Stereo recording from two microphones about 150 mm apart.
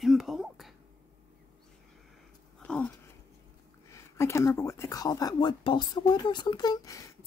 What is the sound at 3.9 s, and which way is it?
Speech, 20° left (ahead or behind).